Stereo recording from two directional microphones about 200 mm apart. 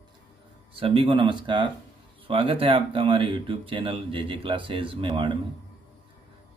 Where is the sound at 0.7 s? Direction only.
25° right (ahead or behind).